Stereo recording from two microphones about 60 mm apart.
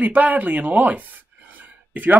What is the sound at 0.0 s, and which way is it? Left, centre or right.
Speech, right.